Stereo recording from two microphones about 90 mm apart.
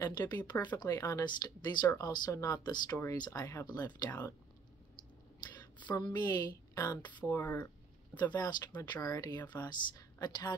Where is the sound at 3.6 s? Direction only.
50° left (ahead or behind).